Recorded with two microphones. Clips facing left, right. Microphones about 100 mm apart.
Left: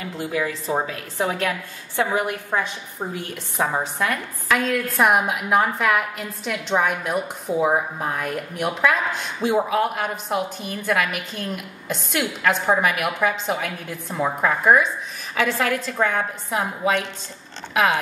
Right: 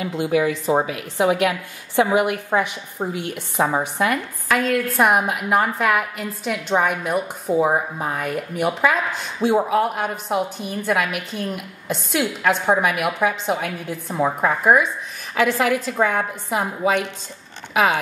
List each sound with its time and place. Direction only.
0.0 s a woman's voice: 15° right (ahead or behind)
3.2 s a woman's voice: 70° right (ahead or behind)
3.5 s a woman's voice: 15° right (ahead or behind)
4.0 s a woman's voice: 5° right (ahead or behind)